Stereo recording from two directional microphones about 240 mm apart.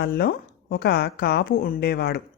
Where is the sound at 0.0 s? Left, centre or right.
Left.